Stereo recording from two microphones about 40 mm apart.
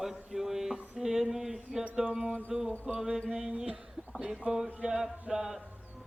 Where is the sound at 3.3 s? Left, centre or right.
Right.